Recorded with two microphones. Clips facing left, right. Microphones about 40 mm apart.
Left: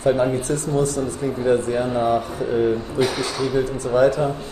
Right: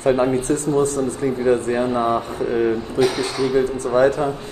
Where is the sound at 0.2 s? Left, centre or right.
Right.